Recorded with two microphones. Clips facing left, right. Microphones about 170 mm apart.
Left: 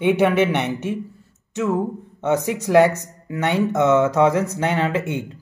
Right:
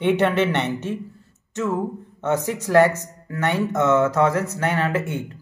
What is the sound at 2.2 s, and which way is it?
Speech, 15° left (ahead or behind).